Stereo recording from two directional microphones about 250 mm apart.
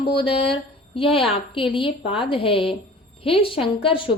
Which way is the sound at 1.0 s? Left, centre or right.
Left.